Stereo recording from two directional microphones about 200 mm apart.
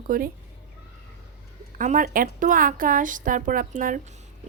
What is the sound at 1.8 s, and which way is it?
A woman's voice, 40° right (ahead or behind).